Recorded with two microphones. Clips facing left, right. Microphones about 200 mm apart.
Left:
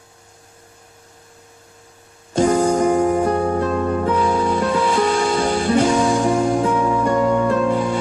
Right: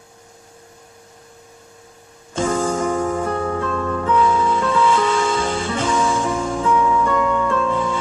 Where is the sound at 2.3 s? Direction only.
40° left (ahead or behind).